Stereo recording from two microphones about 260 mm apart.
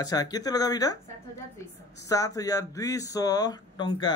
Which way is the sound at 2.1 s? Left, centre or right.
Centre.